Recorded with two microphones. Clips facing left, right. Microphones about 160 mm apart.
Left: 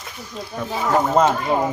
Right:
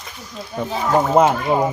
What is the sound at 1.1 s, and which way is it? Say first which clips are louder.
Speech: right 2 dB; 10° right (ahead or behind).